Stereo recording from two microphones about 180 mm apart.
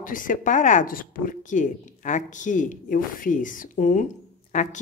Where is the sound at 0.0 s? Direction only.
50° left (ahead or behind).